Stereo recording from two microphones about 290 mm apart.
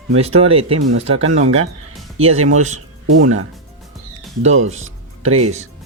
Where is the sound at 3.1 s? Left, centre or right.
Right.